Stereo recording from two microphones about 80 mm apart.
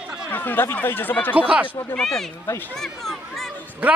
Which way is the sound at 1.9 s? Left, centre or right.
Centre.